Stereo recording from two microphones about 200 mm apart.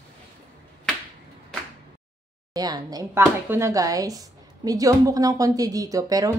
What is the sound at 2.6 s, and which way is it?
A woman's voice, 20° right (ahead or behind).